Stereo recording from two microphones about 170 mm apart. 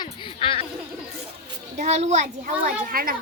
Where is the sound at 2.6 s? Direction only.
60° right (ahead or behind).